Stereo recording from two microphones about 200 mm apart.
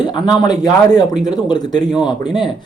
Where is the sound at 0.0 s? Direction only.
20° left (ahead or behind).